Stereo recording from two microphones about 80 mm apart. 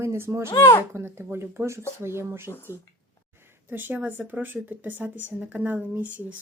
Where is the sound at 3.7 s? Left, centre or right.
Right.